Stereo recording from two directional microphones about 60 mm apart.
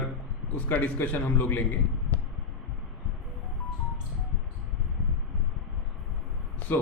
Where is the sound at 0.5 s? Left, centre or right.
Left.